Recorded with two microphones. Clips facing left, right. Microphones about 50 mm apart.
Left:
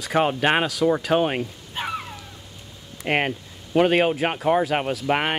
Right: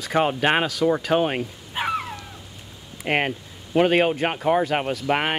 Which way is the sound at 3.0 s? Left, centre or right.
Centre.